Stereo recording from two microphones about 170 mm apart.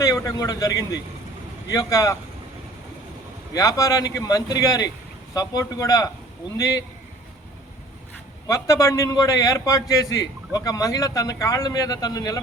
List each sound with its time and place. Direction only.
0.0 s a man's voice: 20° left (ahead or behind)
3.5 s a man's voice: 20° left (ahead or behind)
8.4 s a man's voice: 20° left (ahead or behind)